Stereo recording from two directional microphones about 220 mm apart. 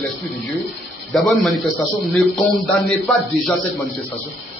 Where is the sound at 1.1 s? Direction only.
Centre (ahead or behind).